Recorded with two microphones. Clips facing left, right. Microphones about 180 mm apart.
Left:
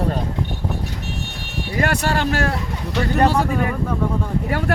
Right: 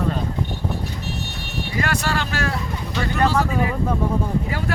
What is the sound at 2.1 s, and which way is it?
Speech, 55° left (ahead or behind).